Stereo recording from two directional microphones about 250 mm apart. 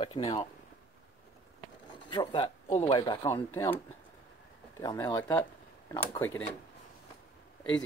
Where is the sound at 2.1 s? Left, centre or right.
Centre.